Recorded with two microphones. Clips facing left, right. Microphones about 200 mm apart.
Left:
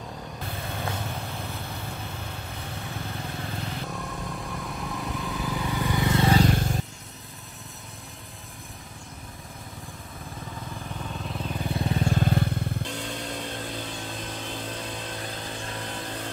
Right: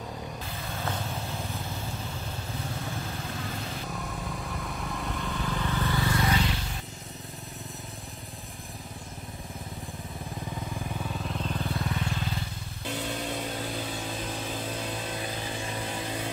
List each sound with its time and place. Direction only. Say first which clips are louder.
3.9 s vehicle: left 1 dB; centre (ahead or behind); by 6.2 s 20° left (ahead or behind)
6.2 s vehicle: left 7 dB; 40° left (ahead or behind)
11.0 s vehicle: left 2 dB; 5° right (ahead or behind)
11.7 s vehicle: left 5 dB; 30° left (ahead or behind)
12.1 s vehicle: left 9 dB; 55° left (ahead or behind)
12.9 s vehicle: right 1 dB; 5° right (ahead or behind)